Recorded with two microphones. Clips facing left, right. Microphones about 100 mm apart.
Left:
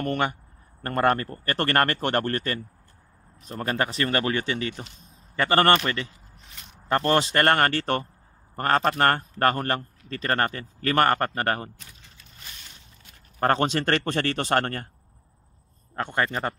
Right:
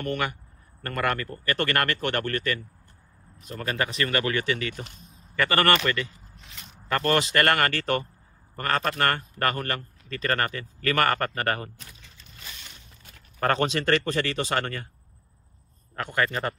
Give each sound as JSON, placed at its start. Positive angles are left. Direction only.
{"t": 0.0, "sound": "a man's voice", "side_deg": 35}
{"t": 13.4, "sound": "a man's voice", "side_deg": 30}
{"t": 16.0, "sound": "speech", "side_deg": 25}